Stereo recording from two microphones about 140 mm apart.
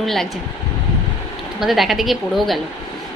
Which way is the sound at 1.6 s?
Centre (ahead or behind).